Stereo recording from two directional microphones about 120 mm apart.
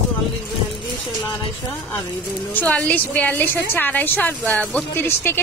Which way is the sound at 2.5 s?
10° left (ahead or behind).